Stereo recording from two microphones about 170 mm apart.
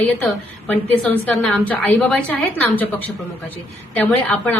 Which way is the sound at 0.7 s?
5° left (ahead or behind).